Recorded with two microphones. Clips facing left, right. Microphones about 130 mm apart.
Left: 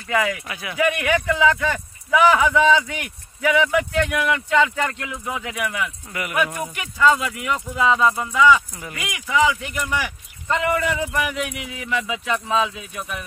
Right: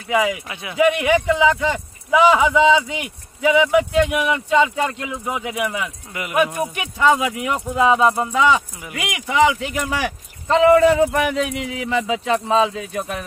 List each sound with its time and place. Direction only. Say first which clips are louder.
0.1 s speech: right 3 dB; 15° right (ahead or behind)
9.8 s speech: right 3 dB; 35° right (ahead or behind)